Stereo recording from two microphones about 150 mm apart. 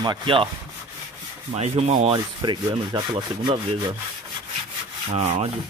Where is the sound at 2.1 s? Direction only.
30° right (ahead or behind).